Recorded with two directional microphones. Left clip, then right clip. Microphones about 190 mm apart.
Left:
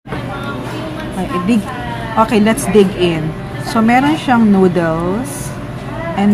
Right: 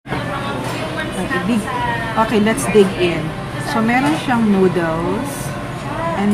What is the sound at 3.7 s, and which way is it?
A woman's voice, 30° left (ahead or behind).